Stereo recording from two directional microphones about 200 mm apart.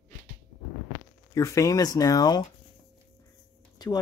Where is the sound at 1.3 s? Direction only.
15° left (ahead or behind).